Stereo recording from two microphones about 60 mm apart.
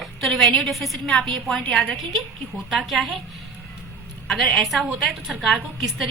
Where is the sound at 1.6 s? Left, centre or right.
Centre.